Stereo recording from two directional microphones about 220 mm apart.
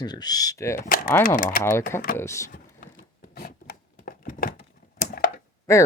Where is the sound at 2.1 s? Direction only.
15° left (ahead or behind).